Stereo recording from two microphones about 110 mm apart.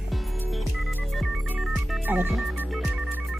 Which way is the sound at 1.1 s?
Centre (ahead or behind).